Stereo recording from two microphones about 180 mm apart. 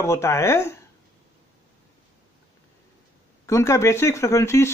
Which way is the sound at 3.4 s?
15° left (ahead or behind).